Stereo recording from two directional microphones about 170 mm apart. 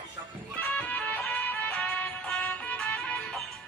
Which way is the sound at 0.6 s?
10° left (ahead or behind).